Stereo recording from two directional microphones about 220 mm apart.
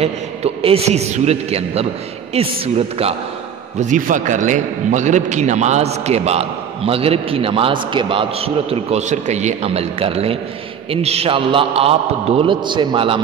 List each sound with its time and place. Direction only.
0.0 s a man's voice: 25° right (ahead or behind)